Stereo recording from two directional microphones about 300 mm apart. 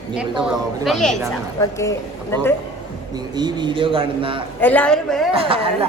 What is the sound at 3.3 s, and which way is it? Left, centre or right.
Speech, centre.